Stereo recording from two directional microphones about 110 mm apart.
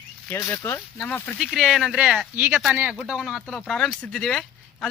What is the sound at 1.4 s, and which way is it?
Speech, 5° right (ahead or behind).